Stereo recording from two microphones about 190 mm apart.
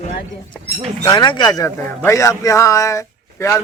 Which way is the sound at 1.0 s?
20° left (ahead or behind).